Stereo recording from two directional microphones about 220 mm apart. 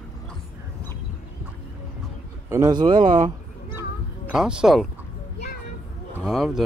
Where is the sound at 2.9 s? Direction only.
35° right (ahead or behind).